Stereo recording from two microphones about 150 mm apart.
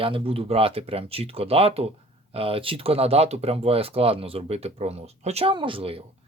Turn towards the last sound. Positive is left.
turn(degrees=-40)  # may be behind; listen again after turning